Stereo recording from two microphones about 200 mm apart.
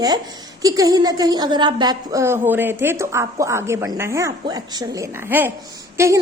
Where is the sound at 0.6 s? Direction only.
15° right (ahead or behind).